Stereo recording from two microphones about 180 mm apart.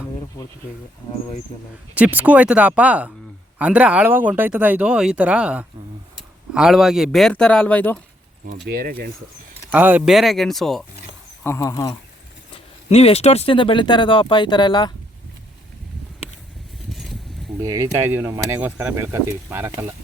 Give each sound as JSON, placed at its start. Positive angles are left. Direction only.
{"t": 2.0, "sound": "speech", "side_deg": -10}
{"t": 8.6, "sound": "speech", "side_deg": -55}
{"t": 9.7, "sound": "speech", "side_deg": -10}
{"t": 11.4, "sound": "speech", "side_deg": 15}
{"t": 12.5, "sound": "speech", "side_deg": 35}
{"t": 16.9, "sound": "a sound", "side_deg": 0}
{"t": 17.6, "sound": "speech", "side_deg": -15}